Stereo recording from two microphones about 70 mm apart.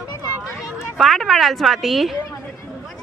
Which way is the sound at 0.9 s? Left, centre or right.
Centre.